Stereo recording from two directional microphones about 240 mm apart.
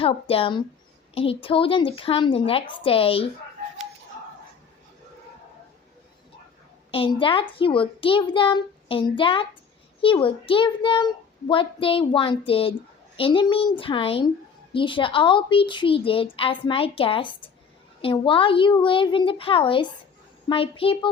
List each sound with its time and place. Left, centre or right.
0.0 s a child's voice: left
6.9 s a child's voice: left